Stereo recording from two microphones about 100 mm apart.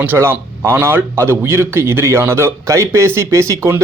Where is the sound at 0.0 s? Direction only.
20° right (ahead or behind).